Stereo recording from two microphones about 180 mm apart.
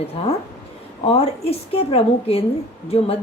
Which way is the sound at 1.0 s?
35° left (ahead or behind).